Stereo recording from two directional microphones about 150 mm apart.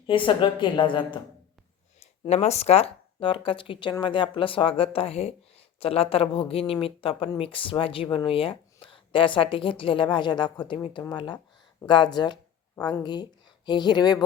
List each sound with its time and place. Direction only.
0.1 s speech: 35° left (ahead or behind)
2.0 s speech: 45° left (ahead or behind); by 14.3 s 30° left (ahead or behind)